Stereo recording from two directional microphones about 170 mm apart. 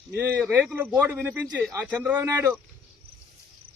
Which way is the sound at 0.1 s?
15° right (ahead or behind).